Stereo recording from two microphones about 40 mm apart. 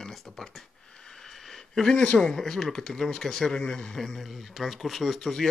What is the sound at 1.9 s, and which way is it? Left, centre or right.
Speech, left.